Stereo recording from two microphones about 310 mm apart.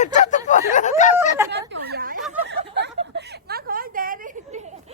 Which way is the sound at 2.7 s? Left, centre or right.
Right.